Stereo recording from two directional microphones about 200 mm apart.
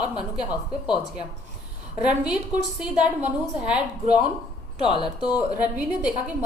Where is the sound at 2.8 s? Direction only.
5° right (ahead or behind).